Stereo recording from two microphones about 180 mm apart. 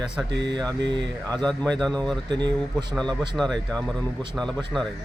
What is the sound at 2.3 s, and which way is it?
Speech, 25° right (ahead or behind).